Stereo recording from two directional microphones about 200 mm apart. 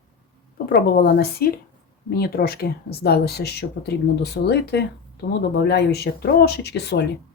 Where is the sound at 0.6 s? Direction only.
50° left (ahead or behind).